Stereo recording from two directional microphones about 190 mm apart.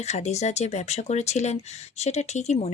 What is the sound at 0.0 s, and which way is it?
Speech, 35° left (ahead or behind).